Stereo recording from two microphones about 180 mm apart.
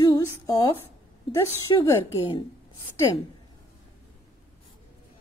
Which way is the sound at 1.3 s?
15° left (ahead or behind).